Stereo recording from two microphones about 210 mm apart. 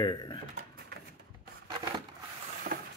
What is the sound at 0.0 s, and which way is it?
Speech, 20° left (ahead or behind).